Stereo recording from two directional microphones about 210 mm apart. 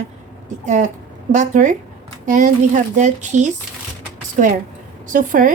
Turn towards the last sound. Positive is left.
turn(degrees=-40)  # may be behind; listen again after turning